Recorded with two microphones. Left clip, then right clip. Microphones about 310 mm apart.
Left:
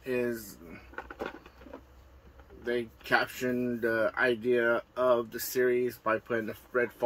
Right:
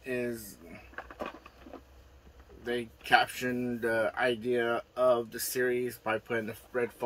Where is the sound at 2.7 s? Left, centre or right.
Centre.